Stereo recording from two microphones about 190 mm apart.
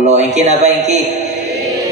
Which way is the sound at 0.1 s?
40° right (ahead or behind).